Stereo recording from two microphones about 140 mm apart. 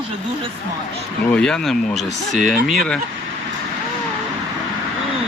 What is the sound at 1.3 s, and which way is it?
Speech, 10° left (ahead or behind).